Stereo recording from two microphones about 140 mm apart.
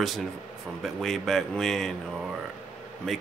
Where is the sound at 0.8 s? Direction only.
Centre (ahead or behind).